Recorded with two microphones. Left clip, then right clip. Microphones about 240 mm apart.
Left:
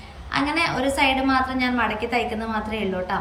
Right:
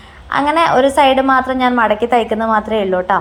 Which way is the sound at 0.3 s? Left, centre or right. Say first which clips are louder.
Right 10 dB; centre.